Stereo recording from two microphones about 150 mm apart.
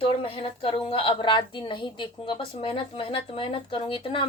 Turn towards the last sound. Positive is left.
turn(degrees=35)  # may be behind; listen again after turning